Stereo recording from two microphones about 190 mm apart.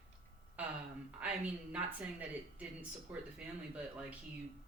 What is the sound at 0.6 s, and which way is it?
A man's voice, 5° right (ahead or behind).